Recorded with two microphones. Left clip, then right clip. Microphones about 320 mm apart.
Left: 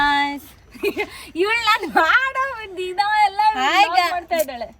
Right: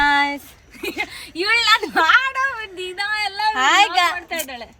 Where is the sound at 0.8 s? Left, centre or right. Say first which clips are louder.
Left 3 dB; centre.